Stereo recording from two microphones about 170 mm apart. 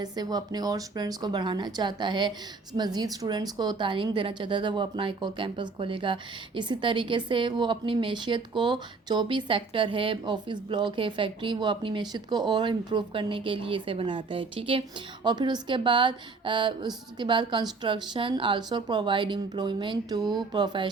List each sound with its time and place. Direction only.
0.0 s a woman's voice: 25° right (ahead or behind)